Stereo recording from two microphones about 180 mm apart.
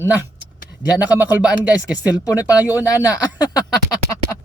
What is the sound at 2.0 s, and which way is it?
Speech, 20° left (ahead or behind).